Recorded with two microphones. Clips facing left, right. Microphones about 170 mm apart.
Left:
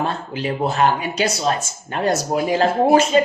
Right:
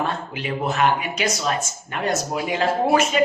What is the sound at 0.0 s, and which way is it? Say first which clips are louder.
A man's voice: left 3 dB; 35° left (ahead or behind).